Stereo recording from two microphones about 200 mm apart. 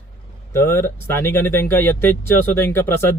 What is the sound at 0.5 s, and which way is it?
Speech, 10° left (ahead or behind).